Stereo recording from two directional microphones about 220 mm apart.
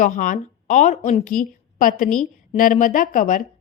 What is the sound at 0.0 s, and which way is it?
A woman's voice, 40° left (ahead or behind).